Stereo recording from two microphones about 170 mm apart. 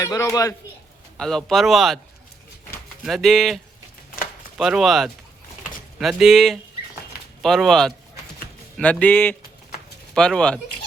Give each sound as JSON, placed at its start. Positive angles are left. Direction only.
{"t": 0.0, "sound": "a man's voice", "side_deg": 20}
{"t": 1.1, "sound": "speech", "side_deg": 0}
{"t": 3.0, "sound": "speech", "side_deg": 0}